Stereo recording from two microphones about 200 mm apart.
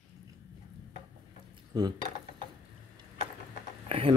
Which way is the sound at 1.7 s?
20° right (ahead or behind).